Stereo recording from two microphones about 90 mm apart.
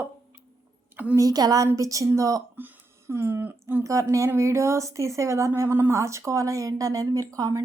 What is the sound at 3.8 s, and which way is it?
Speech, 35° right (ahead or behind).